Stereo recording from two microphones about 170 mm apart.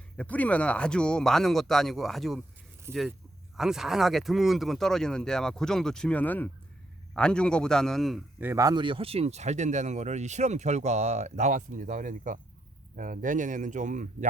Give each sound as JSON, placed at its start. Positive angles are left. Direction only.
{"t": 0.2, "sound": "speech", "side_deg": 10}
{"t": 2.9, "sound": "speech", "side_deg": -15}
{"t": 3.6, "sound": "speech", "side_deg": 0}
{"t": 8.4, "sound": "speech", "side_deg": -15}